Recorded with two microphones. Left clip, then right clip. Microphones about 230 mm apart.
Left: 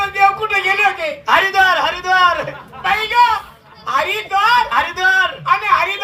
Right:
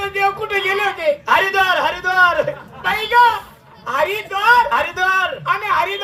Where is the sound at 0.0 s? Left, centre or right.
Right.